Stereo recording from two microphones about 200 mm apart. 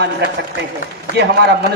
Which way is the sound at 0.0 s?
60° right (ahead or behind).